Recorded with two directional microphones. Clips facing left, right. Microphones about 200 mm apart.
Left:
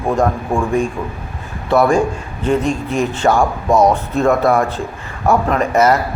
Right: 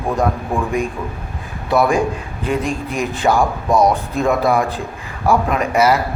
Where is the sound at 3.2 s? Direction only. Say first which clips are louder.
Left 1 dB; 10° right (ahead or behind).